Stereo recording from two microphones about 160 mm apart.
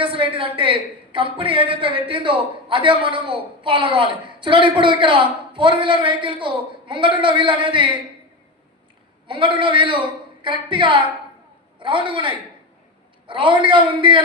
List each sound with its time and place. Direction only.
0.0 s a man's voice: 35° right (ahead or behind)
9.2 s a man's voice: 30° right (ahead or behind)